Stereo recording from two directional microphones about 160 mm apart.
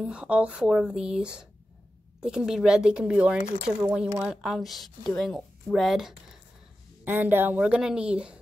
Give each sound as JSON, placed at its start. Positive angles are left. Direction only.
{"t": 0.0, "sound": "speech", "side_deg": -5}
{"t": 7.1, "sound": "a woman's voice", "side_deg": -10}